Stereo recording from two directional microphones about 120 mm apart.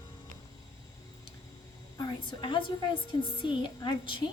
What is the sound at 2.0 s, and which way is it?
A woman's voice, 40° left (ahead or behind).